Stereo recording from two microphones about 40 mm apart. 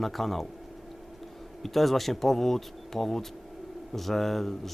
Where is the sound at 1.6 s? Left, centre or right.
Centre.